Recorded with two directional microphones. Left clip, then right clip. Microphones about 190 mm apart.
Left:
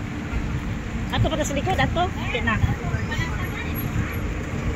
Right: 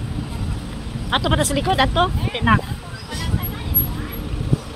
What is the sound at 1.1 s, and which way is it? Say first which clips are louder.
Speech: right 6 dB; 35° right (ahead or behind).